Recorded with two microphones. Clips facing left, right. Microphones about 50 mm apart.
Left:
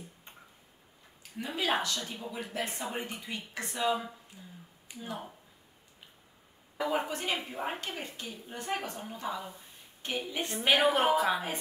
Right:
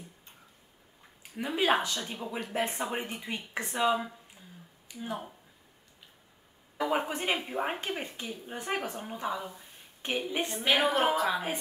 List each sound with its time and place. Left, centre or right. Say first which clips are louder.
1.3 s speech: right 4 dB; right
6.9 s speech: right 2 dB; right
8.7 s a woman's voice: right 3 dB; centre
10.7 s a woman's voice: left 1 dB; centre